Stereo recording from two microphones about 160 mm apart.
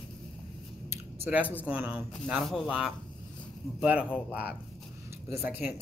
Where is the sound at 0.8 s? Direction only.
10° right (ahead or behind).